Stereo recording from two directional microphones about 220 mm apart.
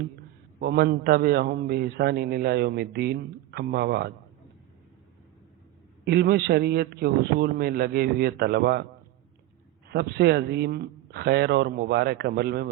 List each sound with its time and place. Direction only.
0.6 s a man's voice: 45° right (ahead or behind)
6.1 s a man's voice: 50° right (ahead or behind)
9.9 s a man's voice: 50° right (ahead or behind)